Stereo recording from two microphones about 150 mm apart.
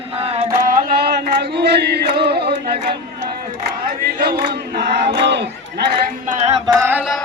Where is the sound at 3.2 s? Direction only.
90° right.